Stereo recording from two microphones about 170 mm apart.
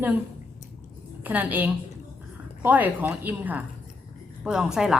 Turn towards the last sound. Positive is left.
turn(degrees=-5)  # may be behind; listen again after turning